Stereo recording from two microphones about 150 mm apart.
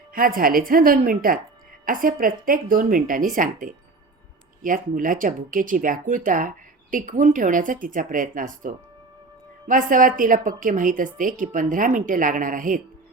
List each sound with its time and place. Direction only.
0.1 s a woman's voice: 70° right (ahead or behind)